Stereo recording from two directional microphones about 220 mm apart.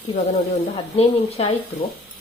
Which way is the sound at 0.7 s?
25° left (ahead or behind).